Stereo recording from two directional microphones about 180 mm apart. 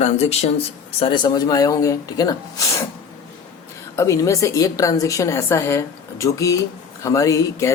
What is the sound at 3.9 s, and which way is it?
A woman's voice, 15° left (ahead or behind).